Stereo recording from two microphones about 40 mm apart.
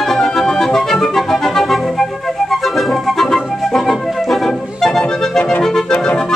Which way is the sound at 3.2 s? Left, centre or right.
Centre.